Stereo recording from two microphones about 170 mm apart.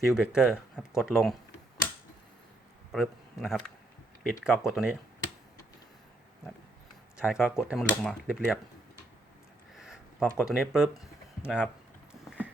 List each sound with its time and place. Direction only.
0.0 s speech: 5° right (ahead or behind)
2.9 s a man's voice: centre (ahead or behind)
7.2 s speech: 5° right (ahead or behind)
9.7 s a sound: centre (ahead or behind)
10.4 s speech: 5° right (ahead or behind)